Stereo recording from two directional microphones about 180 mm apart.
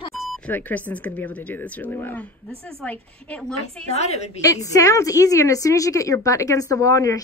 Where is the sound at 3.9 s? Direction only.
35° left (ahead or behind).